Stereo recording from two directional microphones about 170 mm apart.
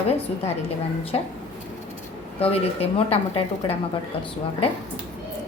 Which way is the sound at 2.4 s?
35° left (ahead or behind).